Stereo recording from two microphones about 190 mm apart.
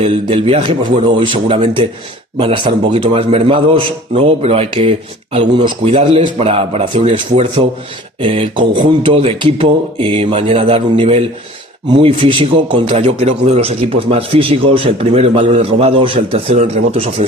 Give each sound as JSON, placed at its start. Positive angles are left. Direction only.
{"t": 0.0, "sound": "a man's voice", "side_deg": -30}